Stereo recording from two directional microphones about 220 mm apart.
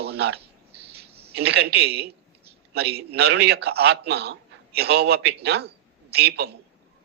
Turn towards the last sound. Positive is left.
turn(degrees=-45)  # may be behind; listen again after turning